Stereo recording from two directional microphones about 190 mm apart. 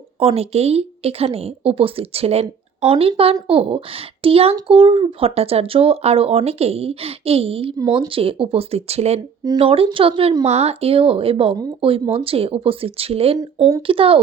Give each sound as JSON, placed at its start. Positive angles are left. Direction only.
{"t": 0.2, "sound": "speech", "side_deg": -30}